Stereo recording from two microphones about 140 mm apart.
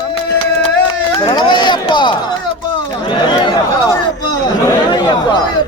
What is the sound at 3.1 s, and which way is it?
Chatter, 35° left (ahead or behind).